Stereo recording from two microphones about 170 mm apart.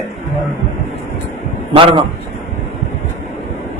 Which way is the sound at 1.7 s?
35° right (ahead or behind).